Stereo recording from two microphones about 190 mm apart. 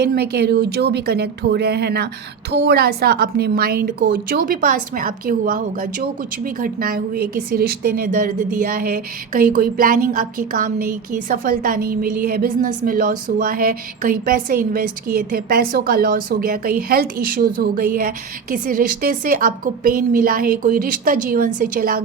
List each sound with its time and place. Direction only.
0.0 s a woman's voice: 55° right (ahead or behind)